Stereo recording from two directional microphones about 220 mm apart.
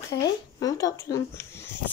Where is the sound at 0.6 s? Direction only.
15° left (ahead or behind).